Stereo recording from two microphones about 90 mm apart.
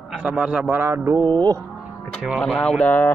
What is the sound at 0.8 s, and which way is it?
Mantra, 30° right (ahead or behind).